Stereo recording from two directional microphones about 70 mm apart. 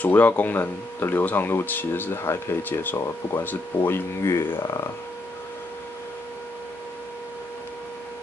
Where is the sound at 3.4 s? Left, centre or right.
Left.